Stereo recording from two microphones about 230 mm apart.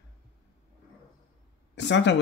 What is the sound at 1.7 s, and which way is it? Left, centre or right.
Speech, left.